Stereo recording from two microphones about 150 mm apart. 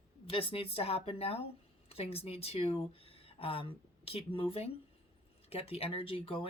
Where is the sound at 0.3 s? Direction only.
40° left (ahead or behind).